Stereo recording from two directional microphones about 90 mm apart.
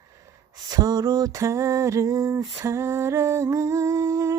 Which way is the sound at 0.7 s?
45° right (ahead or behind).